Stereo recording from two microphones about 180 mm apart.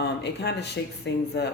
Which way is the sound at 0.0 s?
65° left (ahead or behind).